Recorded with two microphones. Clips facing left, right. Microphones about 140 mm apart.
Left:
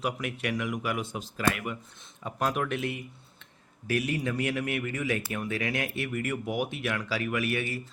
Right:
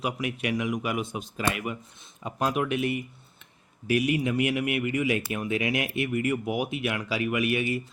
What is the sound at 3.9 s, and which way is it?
A man's voice, 15° right (ahead or behind).